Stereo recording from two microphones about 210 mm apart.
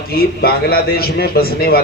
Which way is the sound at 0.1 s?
45° left (ahead or behind).